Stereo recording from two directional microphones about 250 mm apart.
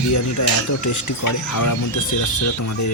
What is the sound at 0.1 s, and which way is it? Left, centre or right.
Speech, left.